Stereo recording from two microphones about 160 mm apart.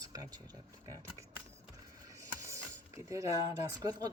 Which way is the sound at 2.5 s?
20° right (ahead or behind).